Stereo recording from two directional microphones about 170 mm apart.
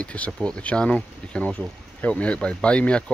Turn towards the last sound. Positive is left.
turn(degrees=5)  # may be behind; listen again after turning